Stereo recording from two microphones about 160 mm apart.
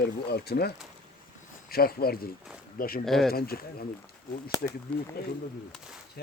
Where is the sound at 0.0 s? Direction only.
90° left.